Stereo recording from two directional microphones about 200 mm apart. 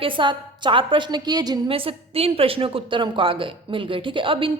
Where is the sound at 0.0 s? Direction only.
25° right (ahead or behind).